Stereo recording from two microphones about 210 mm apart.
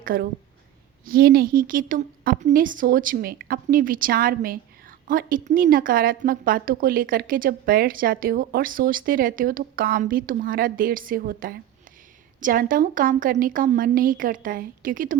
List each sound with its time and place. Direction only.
0.0 s a woman's voice: 45° right (ahead or behind)